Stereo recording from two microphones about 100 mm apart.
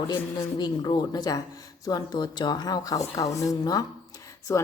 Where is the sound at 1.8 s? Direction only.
40° left (ahead or behind).